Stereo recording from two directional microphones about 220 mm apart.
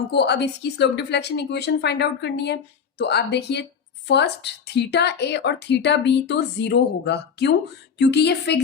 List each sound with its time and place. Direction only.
0.1 s a woman's voice: 50° left (ahead or behind)